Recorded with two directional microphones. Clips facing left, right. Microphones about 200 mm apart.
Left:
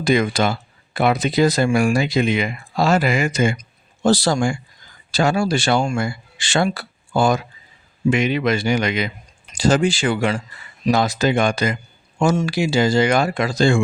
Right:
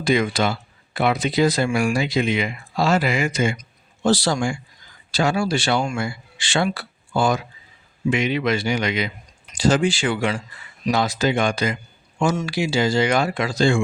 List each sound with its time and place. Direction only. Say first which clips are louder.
0.0 s speech: left 2 dB; 45° left (ahead or behind)